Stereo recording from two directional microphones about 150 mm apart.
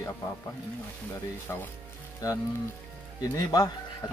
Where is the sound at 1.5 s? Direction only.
15° left (ahead or behind).